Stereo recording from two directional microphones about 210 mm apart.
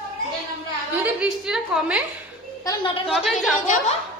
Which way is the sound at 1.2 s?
5° right (ahead or behind).